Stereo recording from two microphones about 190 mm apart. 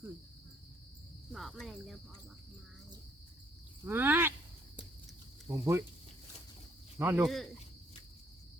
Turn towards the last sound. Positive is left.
turn(degrees=-15)  # may be behind; listen again after turning